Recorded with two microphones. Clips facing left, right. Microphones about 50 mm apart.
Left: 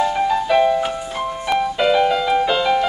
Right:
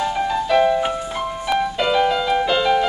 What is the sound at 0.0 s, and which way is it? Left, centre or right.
Music, centre.